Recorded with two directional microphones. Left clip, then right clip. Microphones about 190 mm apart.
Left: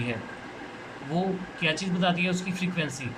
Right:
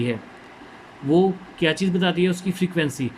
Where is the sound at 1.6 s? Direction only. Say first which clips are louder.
Right 6 dB; 45° right (ahead or behind).